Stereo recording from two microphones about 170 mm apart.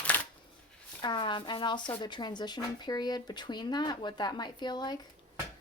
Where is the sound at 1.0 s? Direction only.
25° left (ahead or behind).